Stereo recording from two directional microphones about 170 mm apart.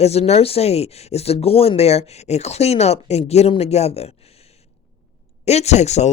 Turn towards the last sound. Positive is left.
turn(degrees=40)  # may be behind; listen again after turning